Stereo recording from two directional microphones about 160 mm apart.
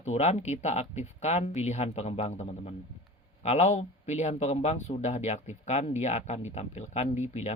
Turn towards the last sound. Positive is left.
turn(degrees=45)  # may be behind; listen again after turning